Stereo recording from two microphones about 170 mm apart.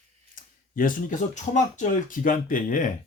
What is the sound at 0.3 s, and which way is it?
Speech, 55° left (ahead or behind).